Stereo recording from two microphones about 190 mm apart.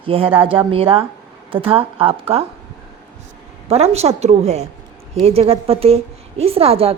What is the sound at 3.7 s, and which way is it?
A woman's voice, 35° right (ahead or behind).